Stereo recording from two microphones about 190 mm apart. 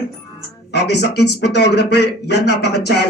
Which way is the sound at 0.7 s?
60° left (ahead or behind).